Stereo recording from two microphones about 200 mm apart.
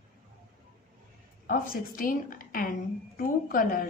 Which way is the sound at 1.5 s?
45° left (ahead or behind).